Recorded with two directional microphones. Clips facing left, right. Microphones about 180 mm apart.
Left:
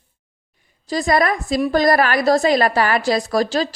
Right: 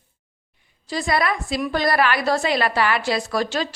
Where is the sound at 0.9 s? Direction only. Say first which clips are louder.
Left 4 dB; 40° left (ahead or behind).